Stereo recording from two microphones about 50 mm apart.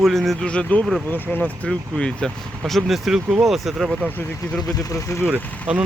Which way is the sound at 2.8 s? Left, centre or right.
Centre.